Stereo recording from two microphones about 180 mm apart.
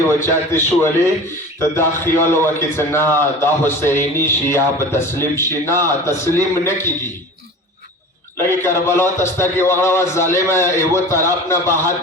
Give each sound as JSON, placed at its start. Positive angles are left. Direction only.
{"t": 0.2, "sound": "a man's voice", "side_deg": 15}
{"t": 8.4, "sound": "a man's voice", "side_deg": 15}